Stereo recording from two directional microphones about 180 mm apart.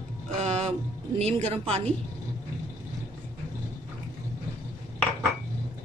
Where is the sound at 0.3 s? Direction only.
40° right (ahead or behind).